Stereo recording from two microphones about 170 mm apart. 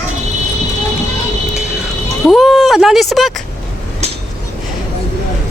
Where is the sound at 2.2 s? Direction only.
Centre (ahead or behind).